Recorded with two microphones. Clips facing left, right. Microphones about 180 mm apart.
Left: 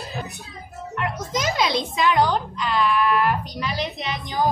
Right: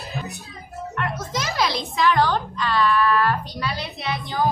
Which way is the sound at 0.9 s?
15° left (ahead or behind).